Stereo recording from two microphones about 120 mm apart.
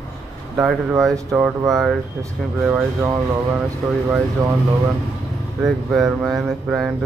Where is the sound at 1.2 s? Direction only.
25° right (ahead or behind).